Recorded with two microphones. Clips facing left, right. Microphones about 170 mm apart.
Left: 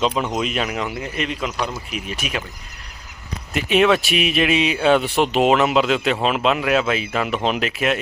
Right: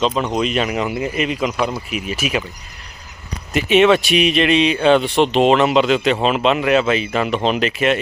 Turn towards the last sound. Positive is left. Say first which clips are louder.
# right 3 dB
turn(degrees=0)  # may be behind; listen again after turning